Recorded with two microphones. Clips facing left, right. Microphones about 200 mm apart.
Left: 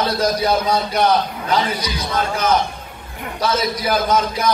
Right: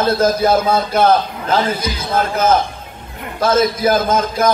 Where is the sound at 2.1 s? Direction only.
50° right (ahead or behind).